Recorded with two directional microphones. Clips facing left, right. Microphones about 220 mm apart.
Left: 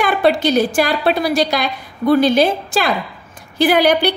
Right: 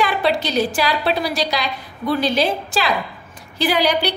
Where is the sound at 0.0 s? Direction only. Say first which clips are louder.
Left 5 dB; 50° left (ahead or behind).